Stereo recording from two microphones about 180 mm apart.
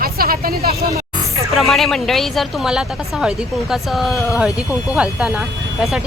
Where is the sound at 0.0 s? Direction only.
55° right (ahead or behind).